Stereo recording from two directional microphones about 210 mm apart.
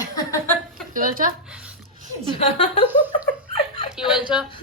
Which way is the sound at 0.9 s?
40° right (ahead or behind).